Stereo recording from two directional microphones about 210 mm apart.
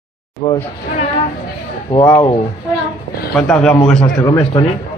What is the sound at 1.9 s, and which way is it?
Speech, 20° left (ahead or behind).